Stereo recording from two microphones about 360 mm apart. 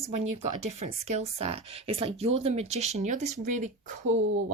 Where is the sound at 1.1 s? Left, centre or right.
Centre.